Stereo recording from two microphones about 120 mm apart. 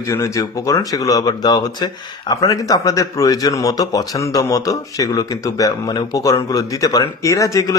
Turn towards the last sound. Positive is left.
turn(degrees=25)  # may be behind; listen again after turning